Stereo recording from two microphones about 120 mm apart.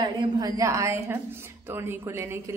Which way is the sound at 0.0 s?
40° right (ahead or behind).